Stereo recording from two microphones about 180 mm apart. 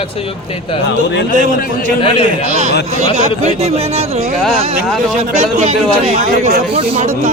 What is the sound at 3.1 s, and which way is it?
Speech, 35° right (ahead or behind).